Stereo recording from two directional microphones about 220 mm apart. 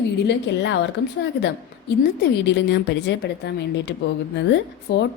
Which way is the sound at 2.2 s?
50° left (ahead or behind).